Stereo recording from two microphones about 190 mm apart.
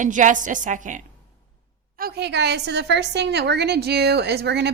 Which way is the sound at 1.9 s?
55° right (ahead or behind).